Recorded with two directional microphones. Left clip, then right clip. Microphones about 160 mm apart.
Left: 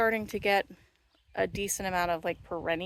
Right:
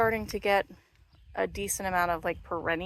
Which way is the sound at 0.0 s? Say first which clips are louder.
Right 1 dB; 30° left (ahead or behind).